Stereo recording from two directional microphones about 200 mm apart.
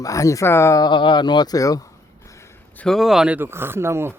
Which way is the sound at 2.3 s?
15° left (ahead or behind).